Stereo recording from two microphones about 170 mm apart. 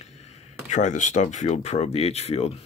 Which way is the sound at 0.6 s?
45° left (ahead or behind).